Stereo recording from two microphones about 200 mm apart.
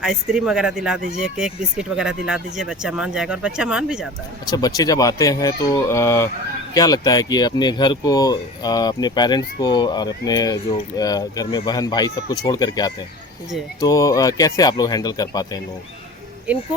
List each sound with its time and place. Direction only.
0.0 s speech: centre (ahead or behind)
4.4 s speech: 20° left (ahead or behind)